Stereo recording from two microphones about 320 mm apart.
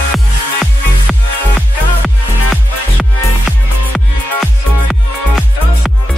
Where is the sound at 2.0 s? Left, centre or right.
Centre.